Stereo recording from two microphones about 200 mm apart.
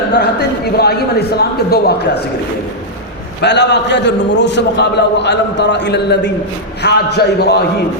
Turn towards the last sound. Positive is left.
turn(degrees=55)  # may be behind; listen again after turning